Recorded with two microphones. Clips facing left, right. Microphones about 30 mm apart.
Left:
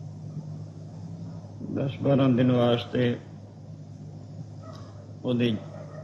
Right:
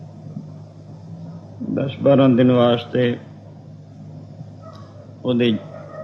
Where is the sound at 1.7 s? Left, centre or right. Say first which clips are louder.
Right 9 dB; right.